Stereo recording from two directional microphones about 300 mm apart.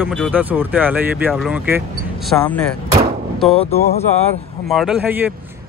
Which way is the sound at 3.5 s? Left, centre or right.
Left.